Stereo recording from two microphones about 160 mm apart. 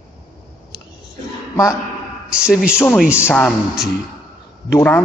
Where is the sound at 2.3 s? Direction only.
5° right (ahead or behind).